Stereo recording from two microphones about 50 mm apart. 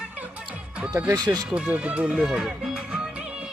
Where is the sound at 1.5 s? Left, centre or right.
Right.